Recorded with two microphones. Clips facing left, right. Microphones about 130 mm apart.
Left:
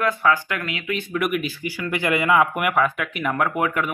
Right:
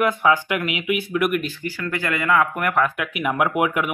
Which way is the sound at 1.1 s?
Centre (ahead or behind).